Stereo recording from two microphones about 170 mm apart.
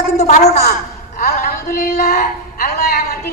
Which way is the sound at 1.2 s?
60° left (ahead or behind).